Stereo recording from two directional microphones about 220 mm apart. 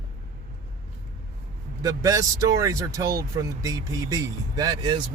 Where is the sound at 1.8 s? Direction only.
15° right (ahead or behind).